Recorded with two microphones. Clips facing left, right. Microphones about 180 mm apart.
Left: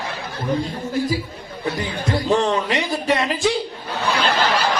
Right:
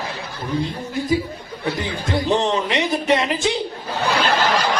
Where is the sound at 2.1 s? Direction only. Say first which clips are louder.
Even; 20° right (ahead or behind).